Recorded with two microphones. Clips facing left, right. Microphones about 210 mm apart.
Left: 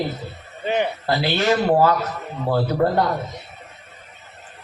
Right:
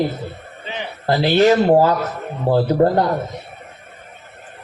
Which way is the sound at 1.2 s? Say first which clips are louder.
Right 7 dB; 30° right (ahead or behind).